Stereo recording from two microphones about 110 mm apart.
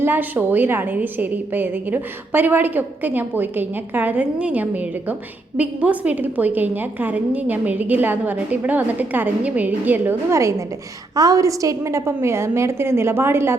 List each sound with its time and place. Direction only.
0.0 s a woman's voice: 20° right (ahead or behind)